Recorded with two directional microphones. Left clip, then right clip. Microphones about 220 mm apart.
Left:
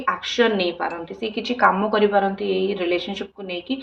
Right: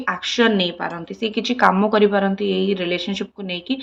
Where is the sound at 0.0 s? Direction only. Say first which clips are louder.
Right 1 dB; 35° right (ahead or behind).